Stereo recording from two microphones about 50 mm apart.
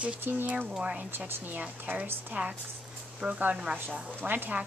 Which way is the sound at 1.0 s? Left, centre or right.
Right.